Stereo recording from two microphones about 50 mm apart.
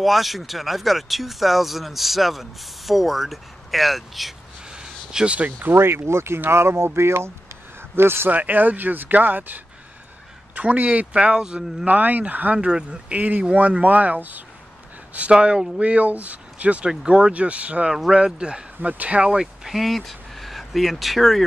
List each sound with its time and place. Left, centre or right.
0.0 s speech: centre
4.7 s a sound: centre
5.6 s speech: right
8.3 s a man's voice: right; by 11.9 s centre
11.9 s speech: right
12.5 s a man's voice: centre; by 14.4 s right
15.3 s speech: centre
15.8 s a man's voice: right
18.8 s a man's voice: right
19.3 s speech: centre